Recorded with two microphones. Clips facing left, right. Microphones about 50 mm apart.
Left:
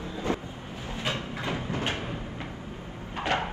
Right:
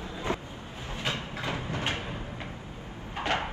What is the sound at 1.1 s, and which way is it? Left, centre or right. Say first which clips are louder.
Train: left 2 dB; left.